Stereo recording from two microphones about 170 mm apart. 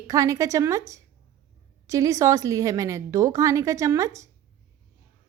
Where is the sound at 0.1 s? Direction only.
20° right (ahead or behind).